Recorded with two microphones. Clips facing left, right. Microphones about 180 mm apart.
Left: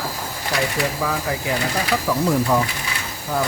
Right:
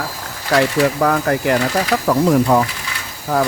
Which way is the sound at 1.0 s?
60° right (ahead or behind).